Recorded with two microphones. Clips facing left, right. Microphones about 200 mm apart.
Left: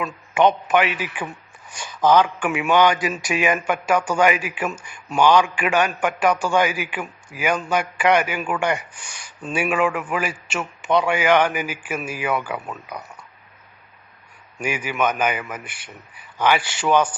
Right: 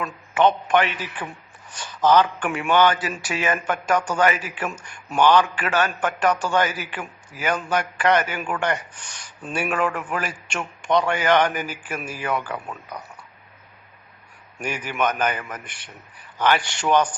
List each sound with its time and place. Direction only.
0.0 s a man's voice: 10° left (ahead or behind)
14.6 s a man's voice: 10° left (ahead or behind)